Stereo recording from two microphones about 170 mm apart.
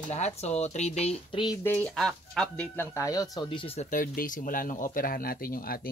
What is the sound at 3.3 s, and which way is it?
Speech, 30° left (ahead or behind).